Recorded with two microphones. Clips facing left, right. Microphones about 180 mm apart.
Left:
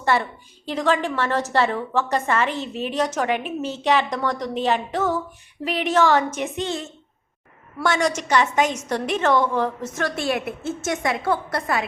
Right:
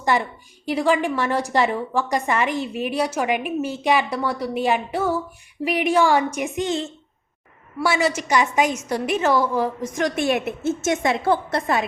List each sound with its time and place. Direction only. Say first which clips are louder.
0.0 s a woman's voice: even; 15° right (ahead or behind)
7.8 s a woman's voice: right 1 dB; 10° right (ahead or behind); by 11.9 s 25° right (ahead or behind)